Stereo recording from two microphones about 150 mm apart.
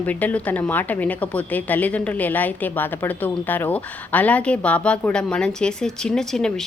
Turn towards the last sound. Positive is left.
turn(degrees=5)  # may be behind; listen again after turning